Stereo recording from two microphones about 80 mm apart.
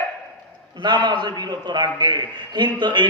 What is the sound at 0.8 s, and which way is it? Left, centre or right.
A man's voice, right.